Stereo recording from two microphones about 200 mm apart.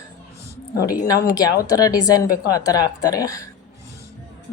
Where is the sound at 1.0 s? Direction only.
20° left (ahead or behind).